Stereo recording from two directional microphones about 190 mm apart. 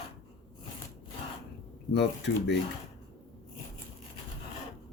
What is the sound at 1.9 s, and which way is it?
Speech, 65° left (ahead or behind).